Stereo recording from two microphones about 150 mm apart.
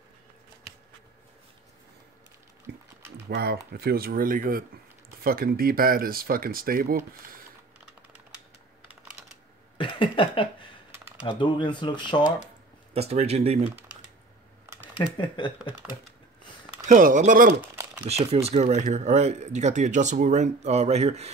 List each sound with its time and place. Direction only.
2.7 s a sound: 90° right
3.3 s speech: 90° right; by 4.6 s 70° right (ahead or behind)
5.2 s speech: 80° right
8.8 s computer keyboard: 10° right (ahead or behind)
9.8 s a sound: 35° left (ahead or behind)
11.2 s speech: 30° left (ahead or behind)
12.9 s speech: 45° right (ahead or behind)
15.0 s speech: 30° left (ahead or behind)
16.8 s speech: 60° right (ahead or behind)
17.6 s typing: 10° right (ahead or behind)
18.0 s speech: 40° right (ahead or behind)